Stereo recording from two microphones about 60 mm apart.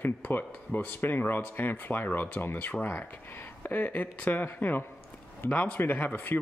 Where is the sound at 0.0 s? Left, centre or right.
Left.